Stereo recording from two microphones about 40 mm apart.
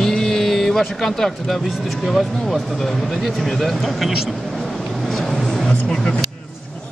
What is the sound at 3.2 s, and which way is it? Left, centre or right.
Speech, centre.